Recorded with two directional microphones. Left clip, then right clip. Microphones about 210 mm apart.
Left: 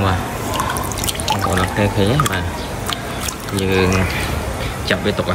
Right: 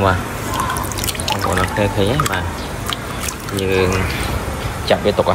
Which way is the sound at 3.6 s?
10° left (ahead or behind).